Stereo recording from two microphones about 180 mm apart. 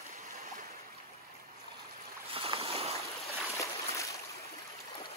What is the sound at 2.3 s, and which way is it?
Boat, 30° right (ahead or behind).